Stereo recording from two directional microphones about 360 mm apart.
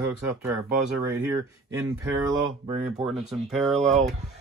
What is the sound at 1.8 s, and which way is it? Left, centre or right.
Speech, centre.